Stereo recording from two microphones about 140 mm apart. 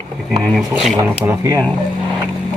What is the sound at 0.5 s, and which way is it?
Speech, centre (ahead or behind).